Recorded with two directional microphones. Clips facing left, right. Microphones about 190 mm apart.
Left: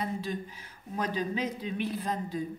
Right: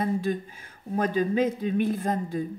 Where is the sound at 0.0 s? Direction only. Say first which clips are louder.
Right 7 dB; 50° right (ahead or behind).